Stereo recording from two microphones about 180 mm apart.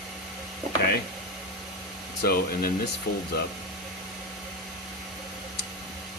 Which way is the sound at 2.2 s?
55° left (ahead or behind).